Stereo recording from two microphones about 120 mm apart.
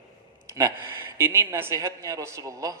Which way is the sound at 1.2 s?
20° right (ahead or behind).